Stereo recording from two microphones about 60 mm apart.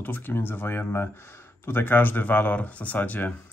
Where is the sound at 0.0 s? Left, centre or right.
Left.